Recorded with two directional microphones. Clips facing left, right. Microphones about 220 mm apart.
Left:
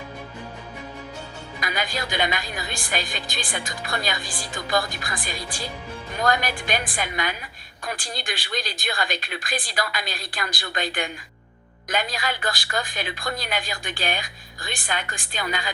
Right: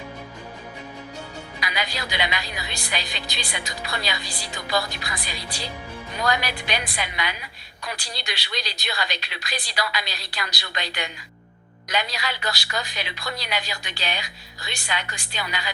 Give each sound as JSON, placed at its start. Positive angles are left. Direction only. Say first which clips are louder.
{"t": 1.5, "sound": "a woman's voice", "louder": "left 2 dB", "side_deg": 50}